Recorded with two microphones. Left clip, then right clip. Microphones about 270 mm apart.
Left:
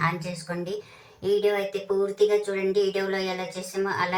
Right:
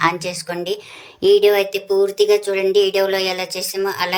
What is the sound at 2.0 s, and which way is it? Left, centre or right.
Speech, right.